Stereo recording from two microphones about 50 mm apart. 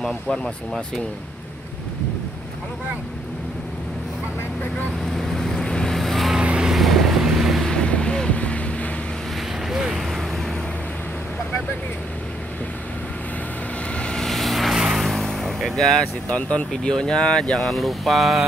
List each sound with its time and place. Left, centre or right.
5.3 s vehicle: centre
6.4 s vehicle: right
6.7 s vehicle: centre
7.6 s boat: centre
9.7 s mechanisms: centre
13.9 s vehicle: centre
14.2 s vehicle: centre
16.3 s speech: left
17.6 s speech: centre